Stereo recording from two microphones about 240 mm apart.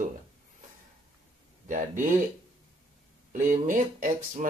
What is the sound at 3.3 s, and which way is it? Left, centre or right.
Speech, right.